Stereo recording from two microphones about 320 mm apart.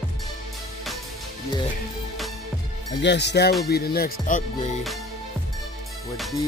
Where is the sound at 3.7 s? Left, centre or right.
Left.